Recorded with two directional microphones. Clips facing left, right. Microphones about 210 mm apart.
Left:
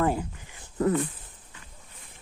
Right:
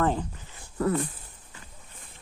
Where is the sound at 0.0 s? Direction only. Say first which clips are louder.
Even; 10° left (ahead or behind).